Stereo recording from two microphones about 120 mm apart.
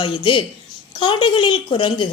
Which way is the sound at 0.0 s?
45° left (ahead or behind).